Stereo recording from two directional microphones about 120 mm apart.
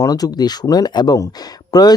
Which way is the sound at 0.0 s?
30° left (ahead or behind).